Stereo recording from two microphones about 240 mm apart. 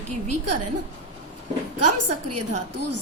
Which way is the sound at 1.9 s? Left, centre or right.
Right.